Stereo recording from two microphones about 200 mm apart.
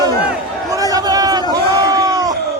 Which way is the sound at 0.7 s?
15° right (ahead or behind).